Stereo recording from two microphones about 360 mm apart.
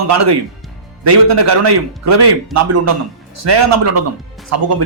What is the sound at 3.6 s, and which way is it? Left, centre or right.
Speech, right.